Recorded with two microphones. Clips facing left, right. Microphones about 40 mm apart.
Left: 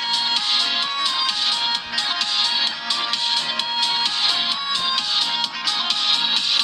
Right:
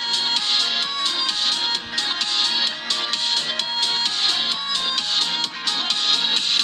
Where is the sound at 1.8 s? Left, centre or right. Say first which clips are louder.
Left 1 dB; left.